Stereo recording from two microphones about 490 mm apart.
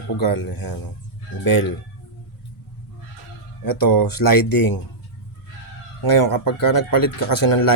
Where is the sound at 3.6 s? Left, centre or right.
Left.